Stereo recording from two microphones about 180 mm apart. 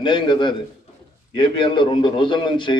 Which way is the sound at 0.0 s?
25° left (ahead or behind).